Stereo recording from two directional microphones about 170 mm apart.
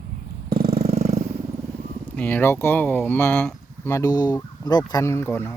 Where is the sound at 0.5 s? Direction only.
65° right (ahead or behind).